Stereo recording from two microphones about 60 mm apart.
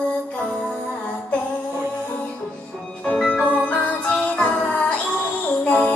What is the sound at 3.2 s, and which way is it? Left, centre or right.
Music, centre.